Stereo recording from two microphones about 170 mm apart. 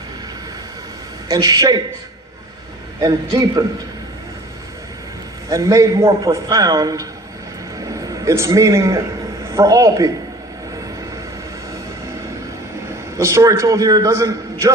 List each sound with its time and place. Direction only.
1.3 s a man's voice: 20° right (ahead or behind)
3.0 s a man's voice: 25° right (ahead or behind)
5.5 s a man's voice: 20° right (ahead or behind)
13.1 s a man's voice: 15° right (ahead or behind)